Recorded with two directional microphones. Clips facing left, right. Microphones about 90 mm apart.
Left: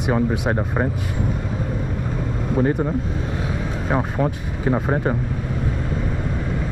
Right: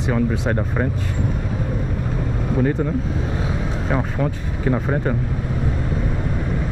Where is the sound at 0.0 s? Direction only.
20° left (ahead or behind).